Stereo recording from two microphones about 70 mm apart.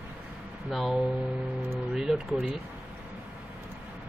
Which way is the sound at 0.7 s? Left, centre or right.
Centre.